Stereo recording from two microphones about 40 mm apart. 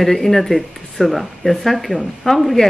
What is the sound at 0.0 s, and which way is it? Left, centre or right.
A woman's voice, centre.